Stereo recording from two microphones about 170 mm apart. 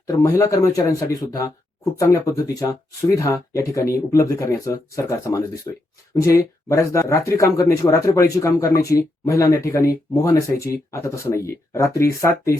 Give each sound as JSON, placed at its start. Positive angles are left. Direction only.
{"t": 0.1, "sound": "speech", "side_deg": 20}